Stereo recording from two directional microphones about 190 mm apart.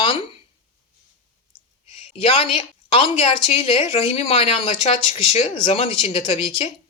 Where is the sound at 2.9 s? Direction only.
30° left (ahead or behind).